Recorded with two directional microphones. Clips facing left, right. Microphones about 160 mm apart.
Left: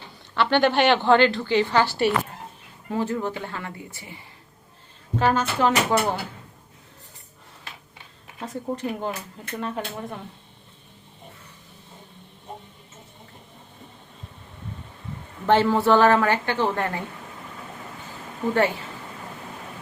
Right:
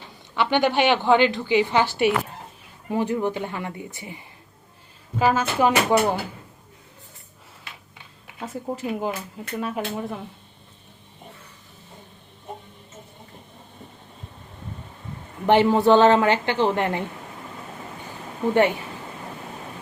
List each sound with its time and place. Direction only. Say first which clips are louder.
0.3 s speech: left 1 dB; 15° right (ahead or behind)
5.2 s speech: right 2 dB; 10° right (ahead or behind)
8.4 s speech: even; 5° right (ahead or behind)
15.4 s a woman's voice: right 2 dB; 15° right (ahead or behind)